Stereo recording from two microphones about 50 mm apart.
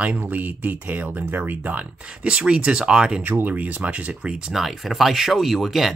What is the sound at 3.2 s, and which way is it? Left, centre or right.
Speech, right.